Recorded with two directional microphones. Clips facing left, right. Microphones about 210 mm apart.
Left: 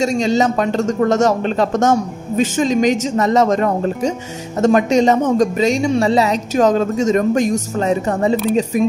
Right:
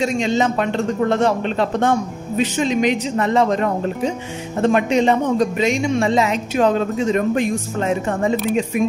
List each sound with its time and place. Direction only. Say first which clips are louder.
0.0 s a man's voice: left 3 dB; 40° left (ahead or behind)